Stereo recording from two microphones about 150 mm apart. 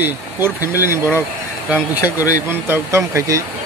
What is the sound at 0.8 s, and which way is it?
Speech, 15° right (ahead or behind).